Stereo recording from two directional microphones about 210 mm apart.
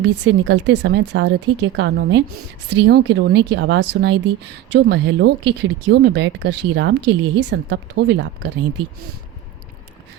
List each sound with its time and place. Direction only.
0.0 s speech: 55° right (ahead or behind)